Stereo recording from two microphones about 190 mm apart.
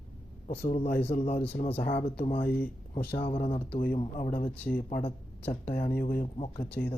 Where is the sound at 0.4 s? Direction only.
35° left (ahead or behind).